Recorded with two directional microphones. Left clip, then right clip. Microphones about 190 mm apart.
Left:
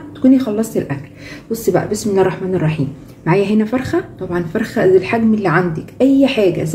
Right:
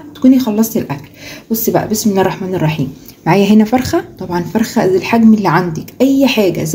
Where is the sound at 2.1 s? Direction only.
50° right (ahead or behind).